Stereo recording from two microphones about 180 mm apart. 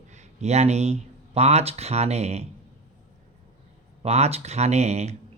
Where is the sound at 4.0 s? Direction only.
35° right (ahead or behind).